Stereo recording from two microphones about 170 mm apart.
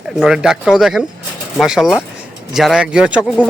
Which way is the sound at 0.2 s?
5° right (ahead or behind).